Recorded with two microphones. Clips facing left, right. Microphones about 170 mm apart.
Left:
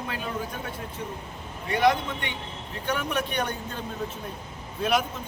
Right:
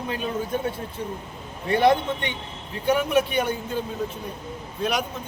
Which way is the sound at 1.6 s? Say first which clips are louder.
Right 4 dB; 30° right (ahead or behind).